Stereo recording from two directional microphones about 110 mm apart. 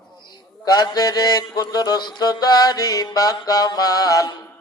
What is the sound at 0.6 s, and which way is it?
Mantra, 35° left (ahead or behind).